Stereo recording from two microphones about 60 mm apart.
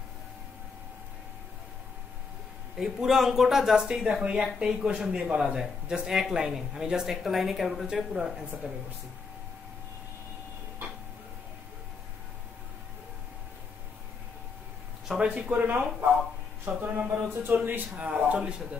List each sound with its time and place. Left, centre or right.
2.8 s speech: centre
4.2 s speech: right
8.6 s speech: right
15.2 s speech: right